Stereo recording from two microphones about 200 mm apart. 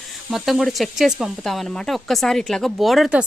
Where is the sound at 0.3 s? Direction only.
Centre (ahead or behind).